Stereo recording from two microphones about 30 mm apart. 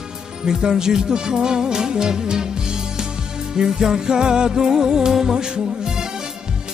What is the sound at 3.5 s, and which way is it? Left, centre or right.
Music, right.